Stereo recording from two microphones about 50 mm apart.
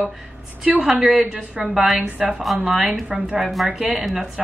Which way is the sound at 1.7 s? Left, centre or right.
Centre.